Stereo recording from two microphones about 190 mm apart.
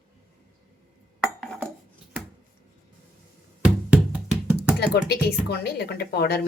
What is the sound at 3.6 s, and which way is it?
Knock, 5° right (ahead or behind).